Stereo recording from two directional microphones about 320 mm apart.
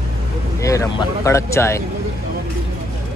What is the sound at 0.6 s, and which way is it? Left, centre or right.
Speech, centre.